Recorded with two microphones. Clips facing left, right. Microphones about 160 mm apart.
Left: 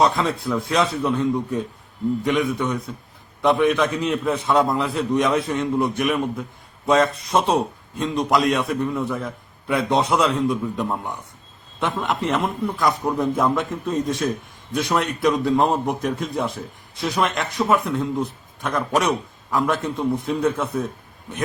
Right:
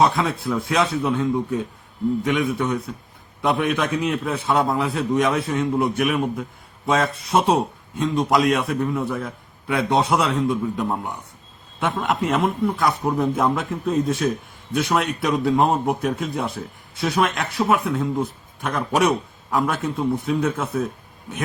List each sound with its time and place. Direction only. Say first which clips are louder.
0.0 s a man's voice: even; centre (ahead or behind)